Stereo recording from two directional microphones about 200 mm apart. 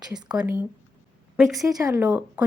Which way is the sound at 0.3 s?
5° right (ahead or behind).